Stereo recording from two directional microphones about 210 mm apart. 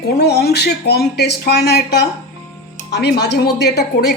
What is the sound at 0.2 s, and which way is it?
A woman's voice, 50° left (ahead or behind).